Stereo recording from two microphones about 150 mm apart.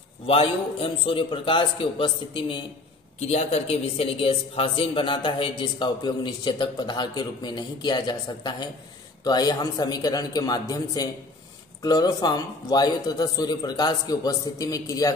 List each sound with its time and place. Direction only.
0.3 s a man's voice: 40° left (ahead or behind)
3.2 s a man's voice: 45° left (ahead or behind); by 15.1 s 25° left (ahead or behind)